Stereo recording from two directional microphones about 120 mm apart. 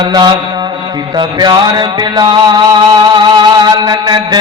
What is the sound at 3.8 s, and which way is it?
Speech, 35° right (ahead or behind).